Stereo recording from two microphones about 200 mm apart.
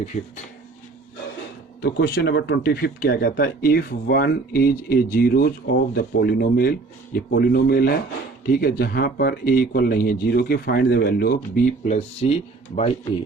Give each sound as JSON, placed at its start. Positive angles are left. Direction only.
{"t": 1.8, "sound": "speech", "side_deg": 50}